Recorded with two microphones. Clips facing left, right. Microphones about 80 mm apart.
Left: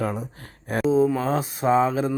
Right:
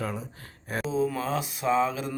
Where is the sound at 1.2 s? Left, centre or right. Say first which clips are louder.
Left 5 dB; left.